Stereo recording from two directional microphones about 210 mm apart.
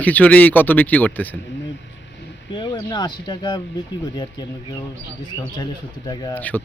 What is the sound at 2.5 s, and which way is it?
Speech, 20° left (ahead or behind).